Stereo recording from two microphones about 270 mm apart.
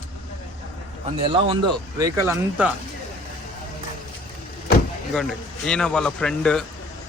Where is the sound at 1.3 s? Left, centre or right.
Centre.